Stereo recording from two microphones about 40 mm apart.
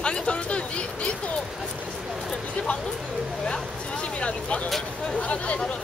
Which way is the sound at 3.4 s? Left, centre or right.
Left.